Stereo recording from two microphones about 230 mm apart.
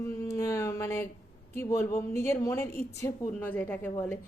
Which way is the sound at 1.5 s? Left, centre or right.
Centre.